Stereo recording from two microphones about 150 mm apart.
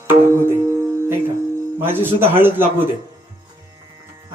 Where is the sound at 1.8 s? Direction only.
15° right (ahead or behind).